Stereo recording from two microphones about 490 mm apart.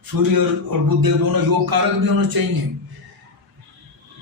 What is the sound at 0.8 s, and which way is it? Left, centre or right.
A man's voice, right.